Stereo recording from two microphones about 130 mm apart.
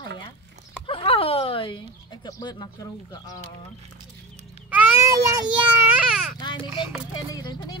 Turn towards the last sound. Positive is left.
turn(degrees=35)  # may be behind; listen again after turning